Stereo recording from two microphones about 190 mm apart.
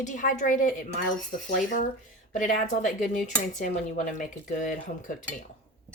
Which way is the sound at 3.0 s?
40° left (ahead or behind).